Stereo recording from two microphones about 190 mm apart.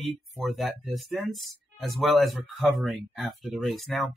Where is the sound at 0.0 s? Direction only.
Centre (ahead or behind).